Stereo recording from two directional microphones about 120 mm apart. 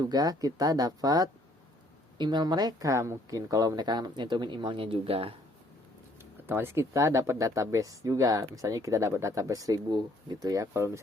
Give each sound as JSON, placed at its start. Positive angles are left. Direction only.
{"t": 0.0, "sound": "speech", "side_deg": -35}
{"t": 6.5, "sound": "speech", "side_deg": -20}